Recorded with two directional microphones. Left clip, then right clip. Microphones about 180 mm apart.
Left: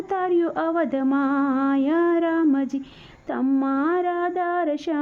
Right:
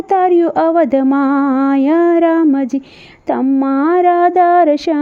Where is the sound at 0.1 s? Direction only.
35° right (ahead or behind).